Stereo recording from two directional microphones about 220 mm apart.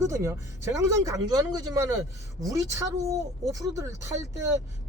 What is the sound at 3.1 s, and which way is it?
Speech, 15° right (ahead or behind).